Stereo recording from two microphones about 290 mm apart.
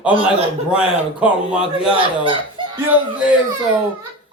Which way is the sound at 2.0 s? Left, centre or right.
Centre.